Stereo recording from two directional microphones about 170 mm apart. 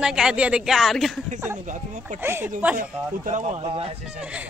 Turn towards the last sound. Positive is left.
turn(degrees=-35)  # may be behind; listen again after turning